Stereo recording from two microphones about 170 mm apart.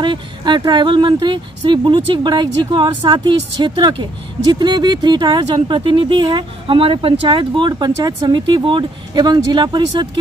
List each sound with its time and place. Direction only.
0.0 s speech: 25° right (ahead or behind)